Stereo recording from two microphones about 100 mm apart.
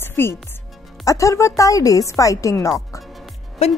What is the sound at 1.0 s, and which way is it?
A woman's voice, 35° left (ahead or behind).